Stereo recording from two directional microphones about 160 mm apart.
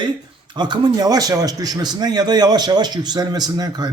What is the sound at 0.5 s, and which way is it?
A man's voice, 30° right (ahead or behind).